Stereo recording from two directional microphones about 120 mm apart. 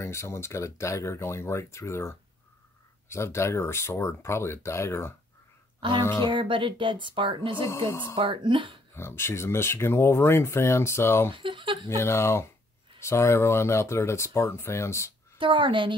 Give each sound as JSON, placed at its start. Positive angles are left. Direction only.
{"t": 0.0, "sound": "speech", "side_deg": 25}
{"t": 6.2, "sound": "speech", "side_deg": -45}
{"t": 7.6, "sound": "speech", "side_deg": 25}
{"t": 8.2, "sound": "speech", "side_deg": -45}
{"t": 8.9, "sound": "speech", "side_deg": 20}
{"t": 11.3, "sound": "speech", "side_deg": -45}
{"t": 11.9, "sound": "speech", "side_deg": 20}
{"t": 15.3, "sound": "a woman's voice", "side_deg": -45}